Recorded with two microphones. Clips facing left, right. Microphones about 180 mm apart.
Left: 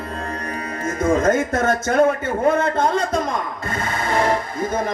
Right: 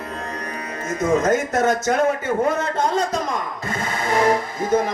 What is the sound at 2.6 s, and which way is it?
Speech, 55° left (ahead or behind).